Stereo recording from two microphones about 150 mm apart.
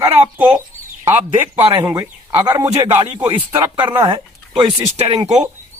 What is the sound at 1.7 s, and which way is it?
Speech, 25° right (ahead or behind).